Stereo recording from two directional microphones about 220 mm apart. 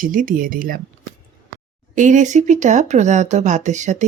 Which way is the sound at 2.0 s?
35° right (ahead or behind).